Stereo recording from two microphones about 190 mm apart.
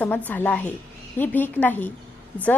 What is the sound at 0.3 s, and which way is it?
A woman's voice, 10° left (ahead or behind).